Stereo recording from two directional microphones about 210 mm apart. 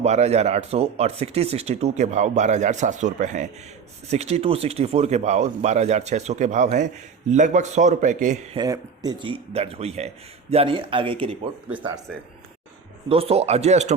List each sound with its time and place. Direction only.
0.0 s speech: 30° right (ahead or behind)
8.5 s speech: 15° right (ahead or behind)
12.1 s speech: 5° left (ahead or behind)
13.1 s speech: 25° right (ahead or behind)